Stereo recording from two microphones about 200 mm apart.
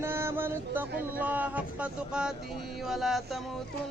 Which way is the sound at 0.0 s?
10° right (ahead or behind).